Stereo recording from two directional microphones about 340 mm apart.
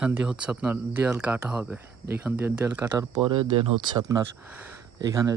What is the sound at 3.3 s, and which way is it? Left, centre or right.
Speech, right.